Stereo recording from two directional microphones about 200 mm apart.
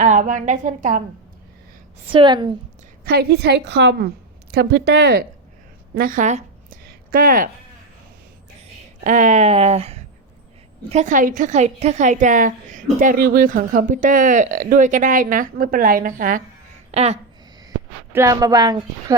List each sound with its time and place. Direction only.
0.0 s a woman's voice: 40° right (ahead or behind)
2.1 s a woman's voice: 20° right (ahead or behind)
3.0 s a woman's voice: 55° right (ahead or behind)
5.9 s a sound: 45° right (ahead or behind)
9.0 s a woman's voice: 40° right (ahead or behind)
17.7 s speech: 15° right (ahead or behind)